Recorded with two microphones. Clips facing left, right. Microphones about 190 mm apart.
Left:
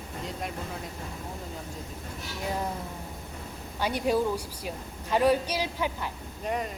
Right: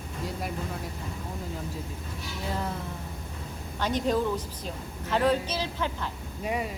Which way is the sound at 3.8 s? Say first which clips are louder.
Even; 10° left (ahead or behind).